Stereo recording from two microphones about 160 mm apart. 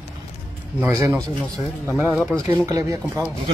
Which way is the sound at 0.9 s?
20° right (ahead or behind).